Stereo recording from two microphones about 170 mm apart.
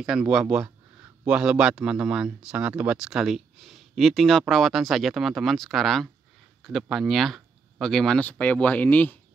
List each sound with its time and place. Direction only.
0.0 s speech: 5° right (ahead or behind)